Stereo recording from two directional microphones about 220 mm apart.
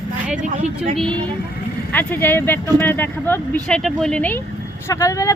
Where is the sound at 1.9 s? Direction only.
10° left (ahead or behind).